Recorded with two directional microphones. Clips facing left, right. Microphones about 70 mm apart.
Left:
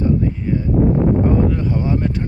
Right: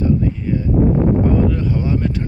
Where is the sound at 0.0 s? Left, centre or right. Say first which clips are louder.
Even; left.